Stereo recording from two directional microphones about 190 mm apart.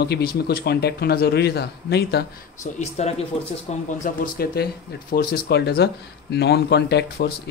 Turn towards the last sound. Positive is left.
turn(degrees=60)  # may be behind; listen again after turning